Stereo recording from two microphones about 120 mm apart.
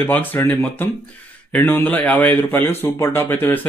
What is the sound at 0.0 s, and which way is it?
Speech, 15° left (ahead or behind).